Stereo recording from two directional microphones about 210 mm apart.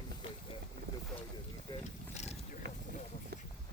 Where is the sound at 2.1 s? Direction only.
30° left (ahead or behind).